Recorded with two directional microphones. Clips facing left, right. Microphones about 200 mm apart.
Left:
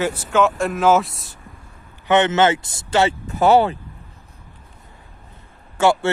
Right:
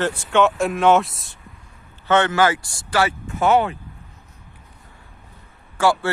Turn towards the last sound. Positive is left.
turn(degrees=25)  # may be behind; listen again after turning